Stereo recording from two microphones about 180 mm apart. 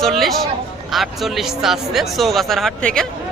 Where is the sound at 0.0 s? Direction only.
Centre (ahead or behind).